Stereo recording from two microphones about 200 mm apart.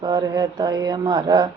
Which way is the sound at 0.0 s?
20° right (ahead or behind).